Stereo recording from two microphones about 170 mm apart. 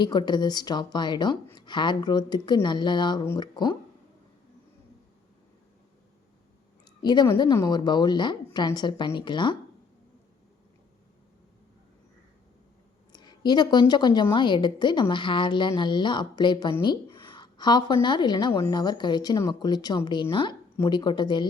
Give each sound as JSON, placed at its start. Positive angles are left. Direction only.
{"t": 0.0, "sound": "a woman's voice", "side_deg": 25}
{"t": 7.0, "sound": "a woman's voice", "side_deg": 25}
{"t": 13.1, "sound": "a woman's voice", "side_deg": 25}